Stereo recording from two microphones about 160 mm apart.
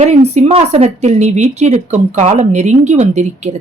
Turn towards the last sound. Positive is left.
turn(degrees=-45)  # may be behind; listen again after turning